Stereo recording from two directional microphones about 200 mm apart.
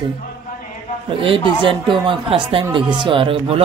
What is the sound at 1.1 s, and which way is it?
A man's voice, 25° right (ahead or behind).